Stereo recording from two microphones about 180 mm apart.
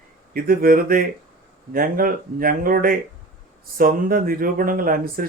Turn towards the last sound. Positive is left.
turn(degrees=-50)  # may be behind; listen again after turning